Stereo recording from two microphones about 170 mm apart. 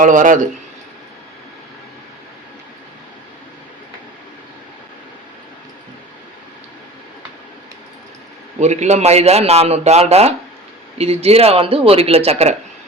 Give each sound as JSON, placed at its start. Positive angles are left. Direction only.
{"t": 0.0, "sound": "a man's voice", "side_deg": -50}
{"t": 8.6, "sound": "a man's voice", "side_deg": -40}